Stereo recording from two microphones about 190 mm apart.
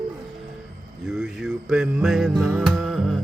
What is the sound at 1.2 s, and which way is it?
Music, centre (ahead or behind).